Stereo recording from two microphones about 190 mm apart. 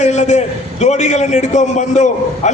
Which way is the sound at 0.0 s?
35° left (ahead or behind).